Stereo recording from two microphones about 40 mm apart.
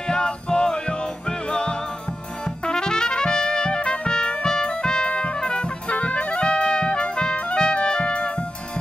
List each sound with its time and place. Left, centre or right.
0.0 s music: centre
2.4 s trumpet: centre
5.9 s music: left
6.5 s music: left